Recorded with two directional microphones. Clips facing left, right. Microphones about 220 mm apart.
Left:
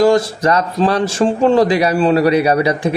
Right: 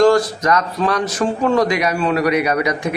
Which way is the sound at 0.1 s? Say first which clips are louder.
Left 2 dB; 30° left (ahead or behind).